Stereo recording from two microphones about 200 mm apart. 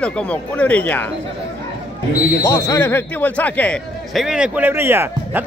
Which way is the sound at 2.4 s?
15° left (ahead or behind).